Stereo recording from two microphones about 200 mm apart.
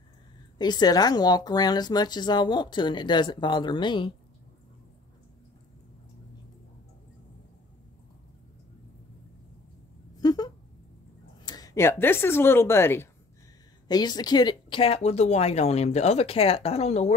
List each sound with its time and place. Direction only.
0.6 s speech: 20° left (ahead or behind)
10.2 s a sound: 20° left (ahead or behind)
11.4 s speech: 20° left (ahead or behind)